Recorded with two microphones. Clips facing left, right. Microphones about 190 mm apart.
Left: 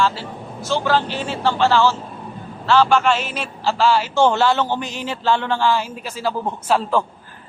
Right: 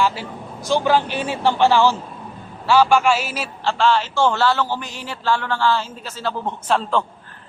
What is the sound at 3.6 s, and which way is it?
A man's voice, 5° left (ahead or behind).